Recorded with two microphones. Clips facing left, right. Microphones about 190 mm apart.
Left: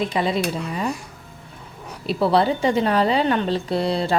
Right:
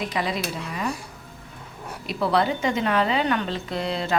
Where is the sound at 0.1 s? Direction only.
25° left (ahead or behind).